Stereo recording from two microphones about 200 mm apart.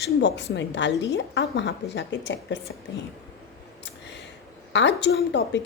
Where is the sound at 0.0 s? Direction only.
60° left (ahead or behind).